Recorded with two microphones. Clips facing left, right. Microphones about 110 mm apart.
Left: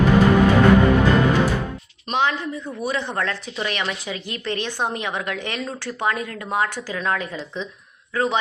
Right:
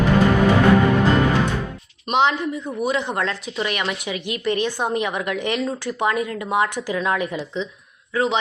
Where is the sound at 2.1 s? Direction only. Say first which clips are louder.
Right 3 dB; 20° right (ahead or behind).